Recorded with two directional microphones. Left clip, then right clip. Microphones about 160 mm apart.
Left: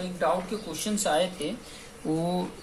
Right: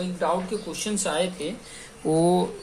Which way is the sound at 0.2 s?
30° right (ahead or behind).